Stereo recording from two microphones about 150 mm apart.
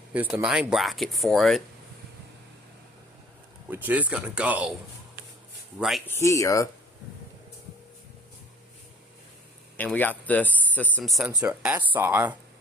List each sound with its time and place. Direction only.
0.1 s speech: 10° right (ahead or behind)
3.7 s speech: 10° right (ahead or behind)
6.1 s speech: 20° left (ahead or behind)
9.7 s speech: 10° left (ahead or behind); by 12.4 s 15° right (ahead or behind)